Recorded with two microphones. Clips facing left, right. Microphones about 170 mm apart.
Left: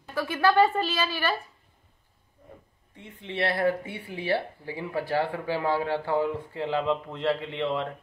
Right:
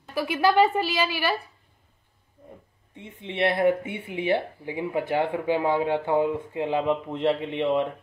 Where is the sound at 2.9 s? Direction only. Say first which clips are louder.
Right 2 dB; 20° right (ahead or behind).